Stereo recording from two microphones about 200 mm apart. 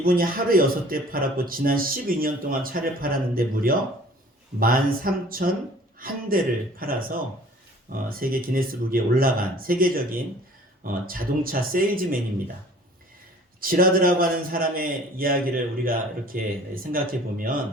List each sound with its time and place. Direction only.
0.0 s a man's voice: 45° right (ahead or behind)
13.6 s a man's voice: 45° right (ahead or behind)